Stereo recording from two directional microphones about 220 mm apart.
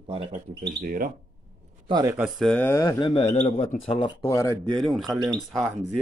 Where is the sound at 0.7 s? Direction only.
40° right (ahead or behind).